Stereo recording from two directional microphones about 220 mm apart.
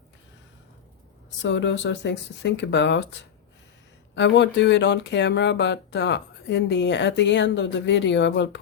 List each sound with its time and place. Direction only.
1.4 s speech: 55° left (ahead or behind)